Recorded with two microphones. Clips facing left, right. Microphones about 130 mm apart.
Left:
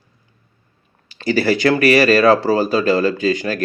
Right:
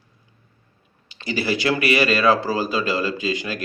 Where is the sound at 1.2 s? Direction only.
40° left (ahead or behind).